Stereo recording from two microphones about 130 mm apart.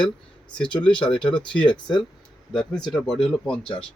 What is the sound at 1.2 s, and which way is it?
Speech, 5° left (ahead or behind).